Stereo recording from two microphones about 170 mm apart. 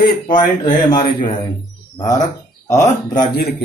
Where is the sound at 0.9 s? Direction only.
30° left (ahead or behind).